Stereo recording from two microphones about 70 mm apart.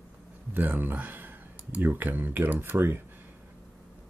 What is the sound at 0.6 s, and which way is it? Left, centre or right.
Speech, right.